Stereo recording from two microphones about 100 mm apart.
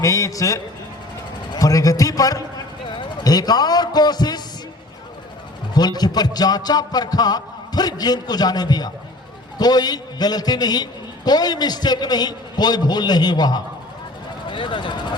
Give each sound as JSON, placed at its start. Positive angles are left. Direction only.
{"t": 0.0, "sound": "a man's voice", "side_deg": 35}
{"t": 5.7, "sound": "a man's voice", "side_deg": 40}
{"t": 14.4, "sound": "speech", "side_deg": 55}